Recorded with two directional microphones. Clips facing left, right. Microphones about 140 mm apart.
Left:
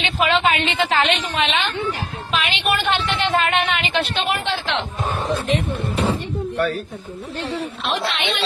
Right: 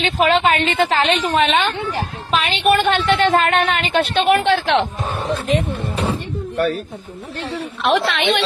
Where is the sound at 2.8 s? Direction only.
50° right (ahead or behind).